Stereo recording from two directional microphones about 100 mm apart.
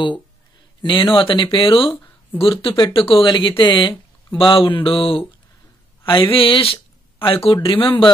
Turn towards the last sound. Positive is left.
turn(degrees=60)  # may be behind; listen again after turning